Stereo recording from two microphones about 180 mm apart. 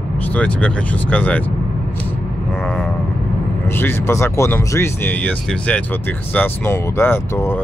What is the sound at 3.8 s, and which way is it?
Speech, 10° left (ahead or behind).